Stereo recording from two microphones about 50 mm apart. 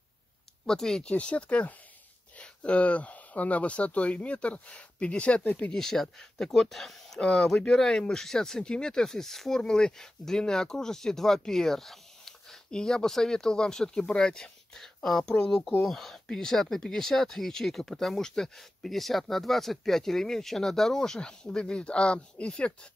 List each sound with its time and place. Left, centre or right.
0.7 s speech: centre
1.0 s speech: left
5.8 s speech: centre
7.2 s speech: centre
9.6 s speech: centre